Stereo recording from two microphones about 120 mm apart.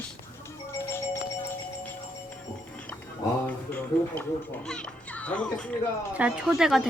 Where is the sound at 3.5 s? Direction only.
15° left (ahead or behind).